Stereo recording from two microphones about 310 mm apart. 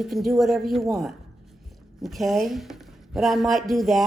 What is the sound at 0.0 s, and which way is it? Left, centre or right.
Speech, centre.